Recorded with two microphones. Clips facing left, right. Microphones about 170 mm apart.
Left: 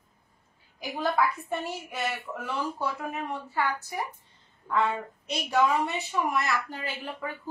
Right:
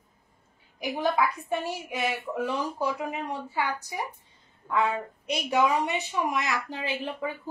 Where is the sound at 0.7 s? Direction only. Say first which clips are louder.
Right 1 dB; 20° right (ahead or behind).